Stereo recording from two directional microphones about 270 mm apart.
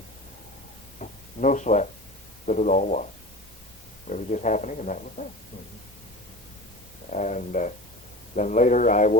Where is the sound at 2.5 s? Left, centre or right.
Left.